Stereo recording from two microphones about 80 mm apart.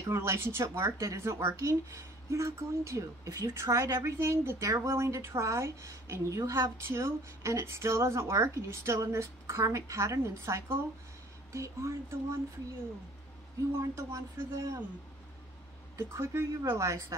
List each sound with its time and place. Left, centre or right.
0.0 s speech: right
13.7 s speech: right
16.0 s speech: right